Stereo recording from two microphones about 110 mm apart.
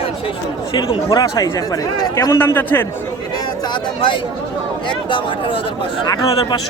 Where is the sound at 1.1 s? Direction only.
30° left (ahead or behind).